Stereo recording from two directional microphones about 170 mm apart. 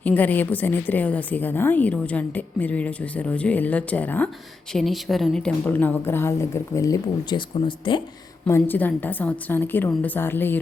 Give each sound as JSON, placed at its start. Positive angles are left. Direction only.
{"t": 0.0, "sound": "a woman's voice", "side_deg": 10}
{"t": 8.4, "sound": "a woman's voice", "side_deg": 15}